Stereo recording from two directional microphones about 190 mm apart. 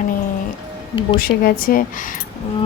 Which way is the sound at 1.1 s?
50° left (ahead or behind).